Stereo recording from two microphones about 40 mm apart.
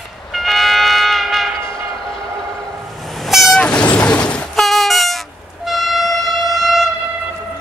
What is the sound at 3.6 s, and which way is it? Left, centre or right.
Train, left.